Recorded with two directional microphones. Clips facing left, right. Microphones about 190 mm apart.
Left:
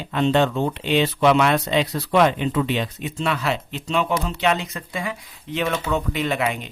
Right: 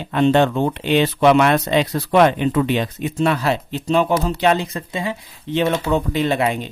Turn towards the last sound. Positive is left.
turn(degrees=-30)  # may be behind; listen again after turning